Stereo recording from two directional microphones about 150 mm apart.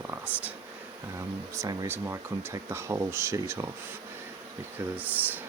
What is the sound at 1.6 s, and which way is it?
Speech, 20° right (ahead or behind).